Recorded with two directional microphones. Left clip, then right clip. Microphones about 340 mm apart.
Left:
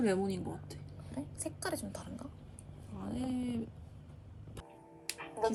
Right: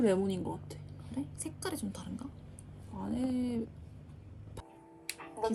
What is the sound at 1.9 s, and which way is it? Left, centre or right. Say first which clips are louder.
Speech: even; left.